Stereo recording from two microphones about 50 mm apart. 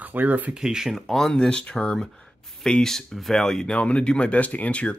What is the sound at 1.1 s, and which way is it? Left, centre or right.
Speech, centre.